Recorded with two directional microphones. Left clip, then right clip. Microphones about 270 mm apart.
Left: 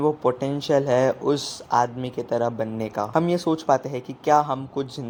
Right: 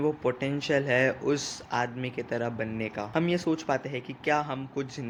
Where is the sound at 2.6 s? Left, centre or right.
Centre.